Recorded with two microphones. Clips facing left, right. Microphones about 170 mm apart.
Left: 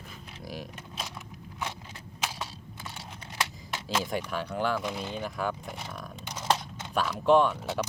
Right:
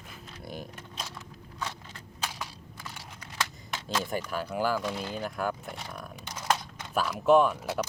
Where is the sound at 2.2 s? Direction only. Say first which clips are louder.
Left 2 dB; 25° left (ahead or behind).